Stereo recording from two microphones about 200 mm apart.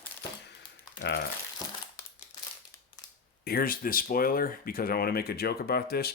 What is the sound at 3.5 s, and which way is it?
Speech, 45° left (ahead or behind).